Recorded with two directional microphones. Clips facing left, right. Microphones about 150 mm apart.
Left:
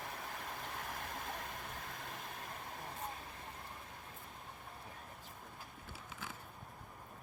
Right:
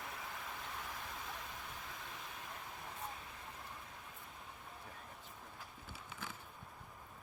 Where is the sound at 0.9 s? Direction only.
55° left (ahead or behind).